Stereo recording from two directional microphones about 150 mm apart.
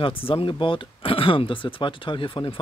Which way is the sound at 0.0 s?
40° left (ahead or behind).